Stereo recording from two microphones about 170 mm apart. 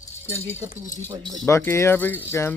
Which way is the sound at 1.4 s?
15° left (ahead or behind).